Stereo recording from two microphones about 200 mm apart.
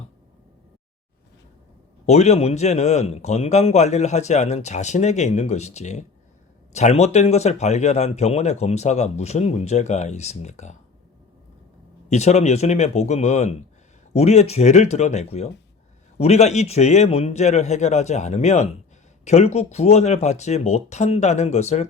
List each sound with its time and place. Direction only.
2.0 s speech: 35° left (ahead or behind)
12.0 s speech: 35° left (ahead or behind)